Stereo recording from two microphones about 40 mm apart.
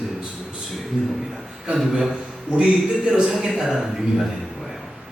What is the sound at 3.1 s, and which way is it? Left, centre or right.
Speech, right.